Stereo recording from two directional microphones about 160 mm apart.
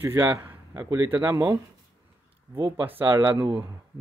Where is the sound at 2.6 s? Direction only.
15° right (ahead or behind).